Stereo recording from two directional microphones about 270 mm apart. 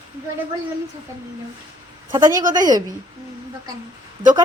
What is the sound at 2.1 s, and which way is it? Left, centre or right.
Speech, centre.